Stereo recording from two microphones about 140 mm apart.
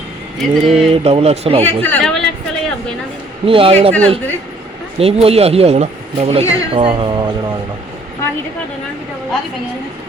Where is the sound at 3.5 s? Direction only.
40° right (ahead or behind).